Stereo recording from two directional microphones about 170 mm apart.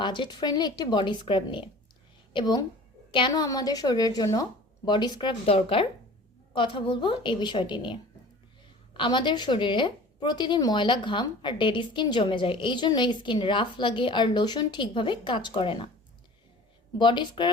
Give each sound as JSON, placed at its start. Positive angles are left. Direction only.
{"t": 0.0, "sound": "a woman's voice", "side_deg": 25}
{"t": 17.0, "sound": "a woman's voice", "side_deg": 30}